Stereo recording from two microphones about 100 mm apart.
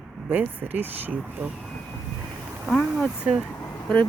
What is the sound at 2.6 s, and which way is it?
Speech, 5° left (ahead or behind).